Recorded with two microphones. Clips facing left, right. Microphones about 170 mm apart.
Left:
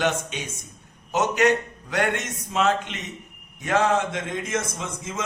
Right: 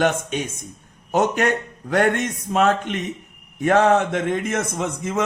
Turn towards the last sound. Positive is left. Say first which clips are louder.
# right 8 dB
turn(degrees=-60)  # may be behind; listen again after turning